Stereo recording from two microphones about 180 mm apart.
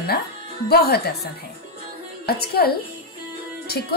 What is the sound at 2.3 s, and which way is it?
Speech, 60° left (ahead or behind).